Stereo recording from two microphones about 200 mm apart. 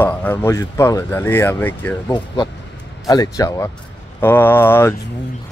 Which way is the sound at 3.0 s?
20° left (ahead or behind).